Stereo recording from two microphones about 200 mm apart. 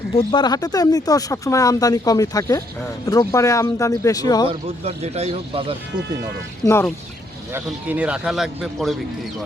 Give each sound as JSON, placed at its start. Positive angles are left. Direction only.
{"t": 0.3, "sound": "speech", "side_deg": 20}
{"t": 4.4, "sound": "speech", "side_deg": -30}
{"t": 6.7, "sound": "speech", "side_deg": 10}
{"t": 7.5, "sound": "speech", "side_deg": -10}